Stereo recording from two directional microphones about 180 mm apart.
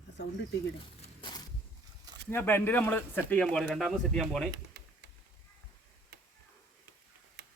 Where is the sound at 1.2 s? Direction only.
25° left (ahead or behind).